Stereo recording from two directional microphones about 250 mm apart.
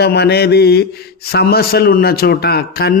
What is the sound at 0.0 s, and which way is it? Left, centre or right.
A man's voice, left.